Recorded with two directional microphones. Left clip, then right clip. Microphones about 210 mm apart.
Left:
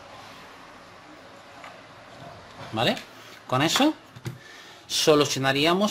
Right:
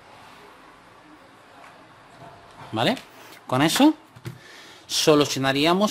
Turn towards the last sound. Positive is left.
turn(degrees=-20)  # may be behind; listen again after turning